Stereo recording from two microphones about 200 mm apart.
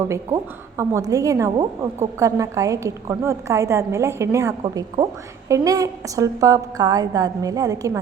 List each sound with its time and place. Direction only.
0.8 s a woman's voice: 15° right (ahead or behind)